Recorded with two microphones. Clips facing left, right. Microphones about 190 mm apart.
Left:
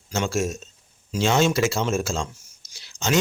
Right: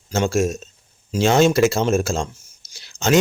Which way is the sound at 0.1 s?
50° right (ahead or behind).